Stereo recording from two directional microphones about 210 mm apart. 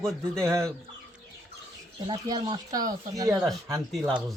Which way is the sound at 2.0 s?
20° right (ahead or behind).